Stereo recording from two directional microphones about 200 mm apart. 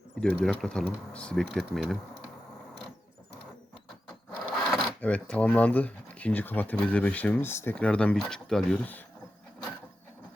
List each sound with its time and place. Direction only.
0.2 s speech: 5° left (ahead or behind)
4.7 s speech: 5° left (ahead or behind)